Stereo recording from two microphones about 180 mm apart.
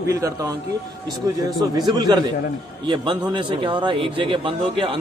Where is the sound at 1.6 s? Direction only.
20° right (ahead or behind).